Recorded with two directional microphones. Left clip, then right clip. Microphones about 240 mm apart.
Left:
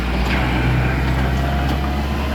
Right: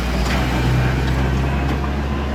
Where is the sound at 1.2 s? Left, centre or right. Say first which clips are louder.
Left 1 dB; left.